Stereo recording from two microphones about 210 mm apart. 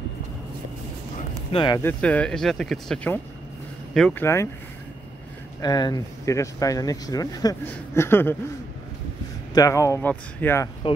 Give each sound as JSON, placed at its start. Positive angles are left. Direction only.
{"t": 1.5, "sound": "speech", "side_deg": 25}
{"t": 1.8, "sound": "speech", "side_deg": 10}
{"t": 5.6, "sound": "speech", "side_deg": 20}
{"t": 9.5, "sound": "speech", "side_deg": 15}